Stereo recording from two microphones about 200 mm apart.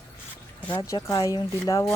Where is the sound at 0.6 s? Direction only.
10° left (ahead or behind).